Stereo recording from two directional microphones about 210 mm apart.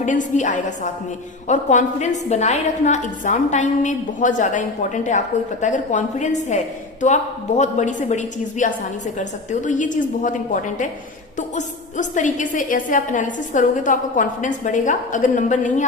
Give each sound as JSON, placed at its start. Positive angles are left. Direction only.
{"t": 0.0, "sound": "a woman's voice", "side_deg": 35}